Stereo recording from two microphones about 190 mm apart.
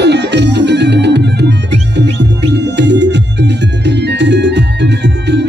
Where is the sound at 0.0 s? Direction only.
65° right (ahead or behind).